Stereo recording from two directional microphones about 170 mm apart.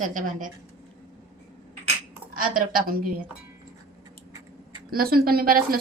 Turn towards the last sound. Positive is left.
turn(degrees=-60)  # may be behind; listen again after turning